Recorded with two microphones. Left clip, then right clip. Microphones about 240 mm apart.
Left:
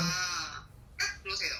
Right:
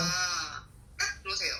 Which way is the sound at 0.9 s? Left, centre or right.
Centre.